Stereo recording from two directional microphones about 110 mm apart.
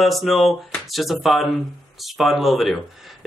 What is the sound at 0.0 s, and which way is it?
Speech, centre (ahead or behind).